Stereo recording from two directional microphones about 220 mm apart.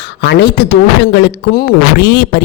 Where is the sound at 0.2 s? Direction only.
50° left (ahead or behind).